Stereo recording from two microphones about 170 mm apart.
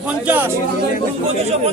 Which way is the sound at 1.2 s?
40° right (ahead or behind).